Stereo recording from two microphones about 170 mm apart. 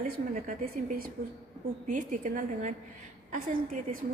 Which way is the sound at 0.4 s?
60° right (ahead or behind).